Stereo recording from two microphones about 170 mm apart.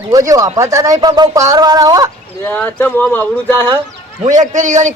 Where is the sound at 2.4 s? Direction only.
10° left (ahead or behind).